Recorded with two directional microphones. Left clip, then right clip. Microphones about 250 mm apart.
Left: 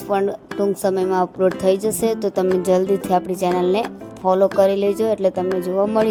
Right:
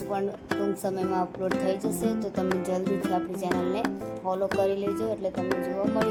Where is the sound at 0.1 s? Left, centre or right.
Left.